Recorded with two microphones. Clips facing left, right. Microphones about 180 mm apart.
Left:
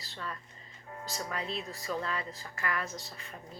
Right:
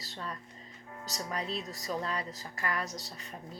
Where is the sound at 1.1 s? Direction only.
40° right (ahead or behind).